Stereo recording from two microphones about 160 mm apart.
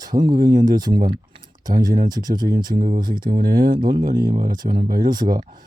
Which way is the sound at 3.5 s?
60° right (ahead or behind).